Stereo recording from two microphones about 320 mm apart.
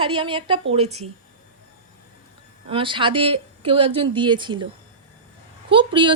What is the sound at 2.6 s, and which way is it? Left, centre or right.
Speech, centre.